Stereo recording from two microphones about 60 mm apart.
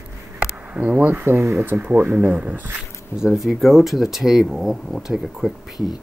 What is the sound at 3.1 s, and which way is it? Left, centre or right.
Speech, centre.